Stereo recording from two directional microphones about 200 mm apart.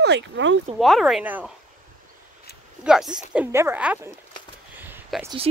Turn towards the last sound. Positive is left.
turn(degrees=-10)  # may be behind; listen again after turning